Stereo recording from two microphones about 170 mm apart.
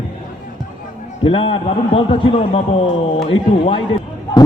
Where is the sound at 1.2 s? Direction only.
30° left (ahead or behind).